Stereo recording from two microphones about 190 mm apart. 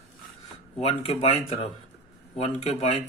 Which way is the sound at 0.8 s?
30° left (ahead or behind).